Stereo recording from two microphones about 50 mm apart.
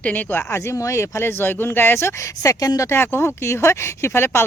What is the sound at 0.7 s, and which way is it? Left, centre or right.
Speech, left.